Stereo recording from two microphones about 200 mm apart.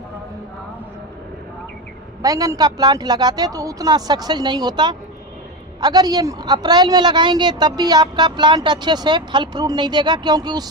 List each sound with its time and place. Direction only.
2.2 s a woman's voice: 15° right (ahead or behind)